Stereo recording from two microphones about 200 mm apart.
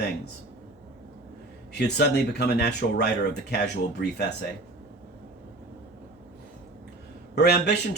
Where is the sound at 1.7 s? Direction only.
55° left (ahead or behind).